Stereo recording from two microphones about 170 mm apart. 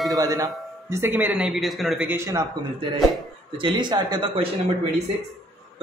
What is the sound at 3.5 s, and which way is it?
Speech, 30° right (ahead or behind).